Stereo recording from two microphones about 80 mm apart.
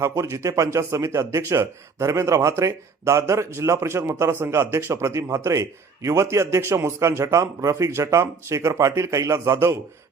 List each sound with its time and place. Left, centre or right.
0.0 s a man's voice: right